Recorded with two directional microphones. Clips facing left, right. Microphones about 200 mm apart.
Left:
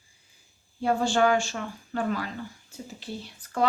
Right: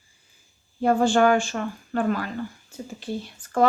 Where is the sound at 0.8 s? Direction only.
50° right (ahead or behind).